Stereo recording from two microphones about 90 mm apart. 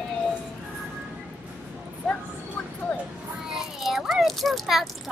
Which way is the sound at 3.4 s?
5° right (ahead or behind).